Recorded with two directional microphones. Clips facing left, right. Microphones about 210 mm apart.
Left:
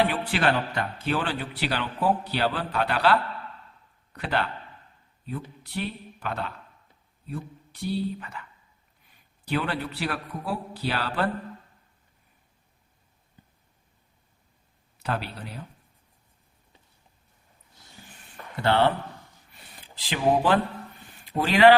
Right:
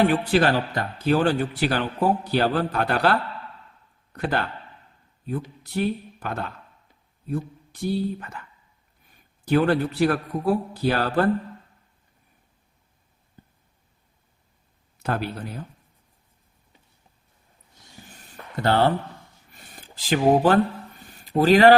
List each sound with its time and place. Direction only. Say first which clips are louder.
0.0 s a man's voice: right 5 dB; 45° right (ahead or behind)
14.9 s speech: right 4 dB; 45° right (ahead or behind)
18.2 s a sound: right 3 dB; 40° right (ahead or behind)
21.2 s a man's voice: right 4 dB; 40° right (ahead or behind)